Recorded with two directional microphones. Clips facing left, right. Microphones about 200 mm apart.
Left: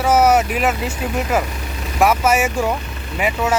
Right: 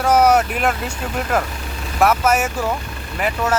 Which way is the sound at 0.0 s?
5° left (ahead or behind).